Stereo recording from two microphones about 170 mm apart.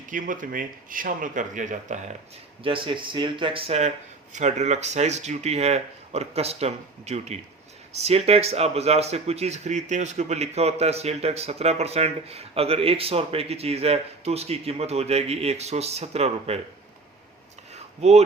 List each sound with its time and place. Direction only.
0.1 s speech: 50° right (ahead or behind)
2.6 s speech: 30° right (ahead or behind)
18.0 s speech: 40° right (ahead or behind)